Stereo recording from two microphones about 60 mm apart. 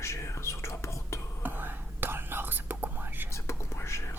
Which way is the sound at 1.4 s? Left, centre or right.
Right.